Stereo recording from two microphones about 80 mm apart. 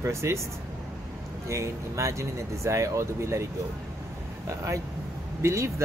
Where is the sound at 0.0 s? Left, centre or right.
Right.